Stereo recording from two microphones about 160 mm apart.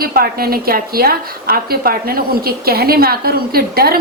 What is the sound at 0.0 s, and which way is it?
A woman's voice, 70° right (ahead or behind).